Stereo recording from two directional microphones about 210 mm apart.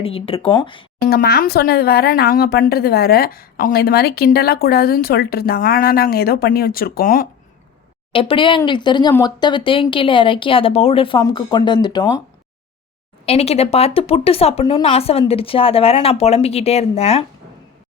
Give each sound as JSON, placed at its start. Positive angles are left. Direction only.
{"t": 0.0, "sound": "speech", "side_deg": 25}
{"t": 1.0, "sound": "speech", "side_deg": 45}
{"t": 8.1, "sound": "speech", "side_deg": 25}
{"t": 13.2, "sound": "speech", "side_deg": 30}